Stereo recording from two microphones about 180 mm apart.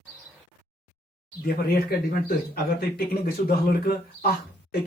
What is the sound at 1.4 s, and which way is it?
Speech, 55° left (ahead or behind).